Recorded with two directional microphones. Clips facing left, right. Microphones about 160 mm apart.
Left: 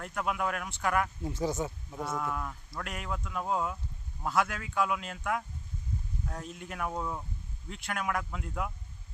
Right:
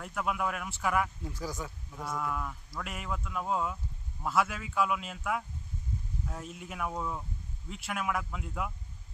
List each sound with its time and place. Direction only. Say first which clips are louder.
0.0 s a man's voice: even; centre (ahead or behind)
1.2 s speech: left 6 dB; 25° left (ahead or behind)
2.0 s a man's voice: left 1 dB; 5° left (ahead or behind)